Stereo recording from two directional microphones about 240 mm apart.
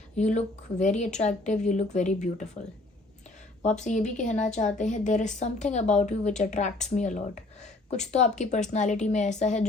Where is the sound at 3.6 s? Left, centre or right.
Left.